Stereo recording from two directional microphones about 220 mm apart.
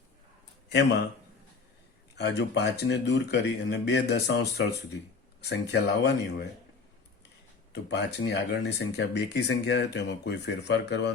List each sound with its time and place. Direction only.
0.7 s a man's voice: 50° left (ahead or behind)
2.1 s speech: 50° left (ahead or behind)
7.7 s speech: 50° left (ahead or behind)